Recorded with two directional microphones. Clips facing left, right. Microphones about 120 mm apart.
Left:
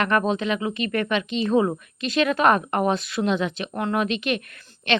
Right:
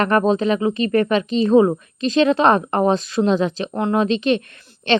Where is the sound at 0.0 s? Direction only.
35° right (ahead or behind).